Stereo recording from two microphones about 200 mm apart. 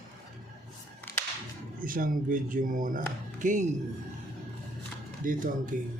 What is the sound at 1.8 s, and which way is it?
Speech, 45° right (ahead or behind).